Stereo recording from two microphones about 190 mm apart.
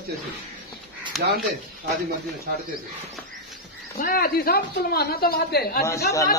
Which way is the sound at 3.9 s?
50° left (ahead or behind).